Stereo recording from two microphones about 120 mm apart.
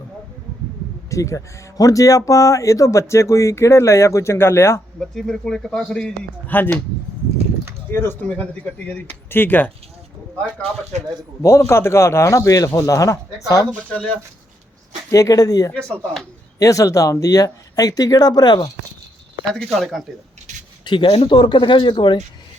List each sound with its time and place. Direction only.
1.1 s speech: 25° left (ahead or behind)
4.9 s speech: 5° left (ahead or behind)
7.9 s speech: 20° left (ahead or behind)
10.9 s a man's voice: 70° right (ahead or behind)
11.4 s speech: 25° left (ahead or behind)
15.1 s speech: 30° left (ahead or behind)
19.5 s speech: centre (ahead or behind)
20.5 s a sound: 85° right
20.8 s speech: 40° left (ahead or behind)